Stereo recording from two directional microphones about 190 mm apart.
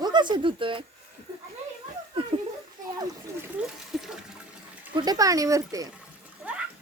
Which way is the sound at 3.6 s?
5° right (ahead or behind).